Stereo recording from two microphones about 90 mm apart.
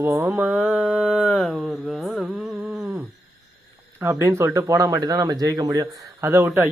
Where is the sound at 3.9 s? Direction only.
25° right (ahead or behind); by 6.3 s 40° right (ahead or behind).